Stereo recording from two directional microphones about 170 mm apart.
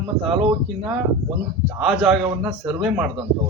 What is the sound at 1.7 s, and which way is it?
Speech, 5° right (ahead or behind).